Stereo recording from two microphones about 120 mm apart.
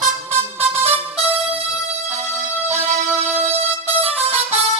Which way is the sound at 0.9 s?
55° right (ahead or behind).